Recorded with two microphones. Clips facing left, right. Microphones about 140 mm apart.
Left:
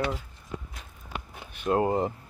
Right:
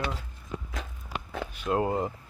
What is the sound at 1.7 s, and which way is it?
Speech, 25° left (ahead or behind).